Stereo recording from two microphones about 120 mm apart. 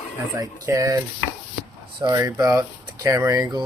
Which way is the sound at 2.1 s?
25° right (ahead or behind).